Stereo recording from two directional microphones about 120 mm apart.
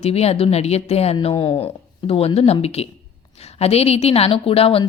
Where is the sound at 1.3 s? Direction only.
45° left (ahead or behind).